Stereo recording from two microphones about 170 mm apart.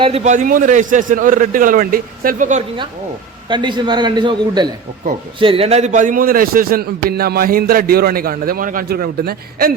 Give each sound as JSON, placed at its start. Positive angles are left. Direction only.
{"t": 0.0, "sound": "a man's voice", "side_deg": -40}
{"t": 3.5, "sound": "a man's voice", "side_deg": -25}